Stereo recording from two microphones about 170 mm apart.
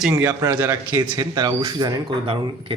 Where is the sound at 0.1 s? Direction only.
15° right (ahead or behind).